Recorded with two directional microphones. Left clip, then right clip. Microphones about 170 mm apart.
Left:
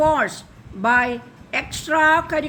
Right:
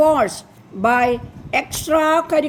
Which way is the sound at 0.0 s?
20° right (ahead or behind).